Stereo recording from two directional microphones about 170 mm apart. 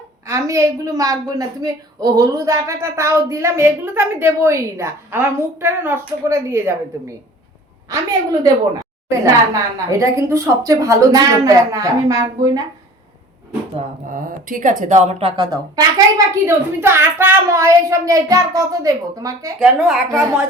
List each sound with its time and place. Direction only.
0.3 s a woman's voice: 15° right (ahead or behind)
7.9 s a woman's voice: 20° right (ahead or behind)
9.9 s child singing: 15° right (ahead or behind)
14.1 s a woman's voice: 50° right (ahead or behind); by 16.4 s 20° right (ahead or behind)
16.8 s child singing: 15° right (ahead or behind)
19.5 s speech: centre (ahead or behind)